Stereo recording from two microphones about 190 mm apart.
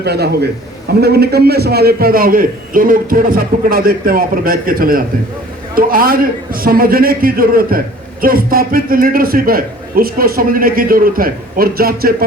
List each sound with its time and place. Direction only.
0.0 s a man's voice: 60° right (ahead or behind)